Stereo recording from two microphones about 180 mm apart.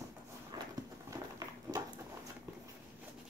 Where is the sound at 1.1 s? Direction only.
20° right (ahead or behind).